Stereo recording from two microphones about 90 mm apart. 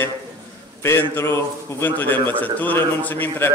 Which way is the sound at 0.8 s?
25° left (ahead or behind).